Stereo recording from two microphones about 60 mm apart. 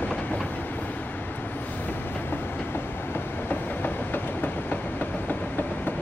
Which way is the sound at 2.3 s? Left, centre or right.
Left.